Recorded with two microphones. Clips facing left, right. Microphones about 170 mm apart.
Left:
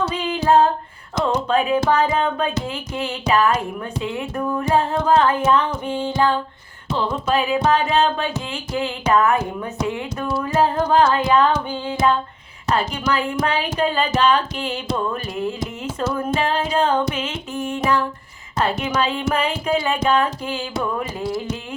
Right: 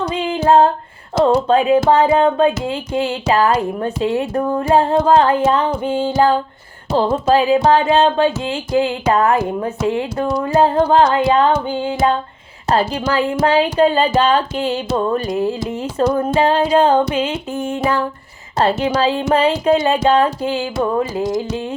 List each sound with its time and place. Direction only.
0.3 s female singing: 25° right (ahead or behind)
1.1 s music: 30° right (ahead or behind)
6.1 s music: 40° right (ahead or behind)
18.5 s music: 30° right (ahead or behind)